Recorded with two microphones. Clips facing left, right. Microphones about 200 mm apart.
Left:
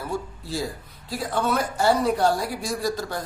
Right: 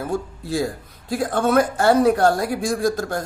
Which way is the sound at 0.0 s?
50° right (ahead or behind).